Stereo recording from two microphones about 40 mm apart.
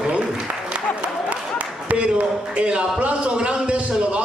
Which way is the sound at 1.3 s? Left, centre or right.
Right.